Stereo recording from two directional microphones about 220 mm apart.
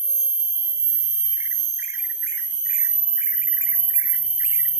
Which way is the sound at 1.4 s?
10° right (ahead or behind).